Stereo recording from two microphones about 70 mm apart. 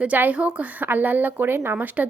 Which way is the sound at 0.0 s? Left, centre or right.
Right.